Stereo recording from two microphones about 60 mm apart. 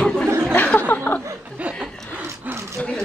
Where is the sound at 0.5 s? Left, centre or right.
Left.